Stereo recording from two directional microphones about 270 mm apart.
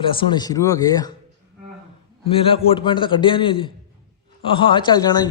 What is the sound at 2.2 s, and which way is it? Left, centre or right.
A man's voice, centre.